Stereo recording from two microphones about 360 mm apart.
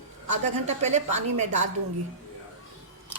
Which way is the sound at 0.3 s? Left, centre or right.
Centre.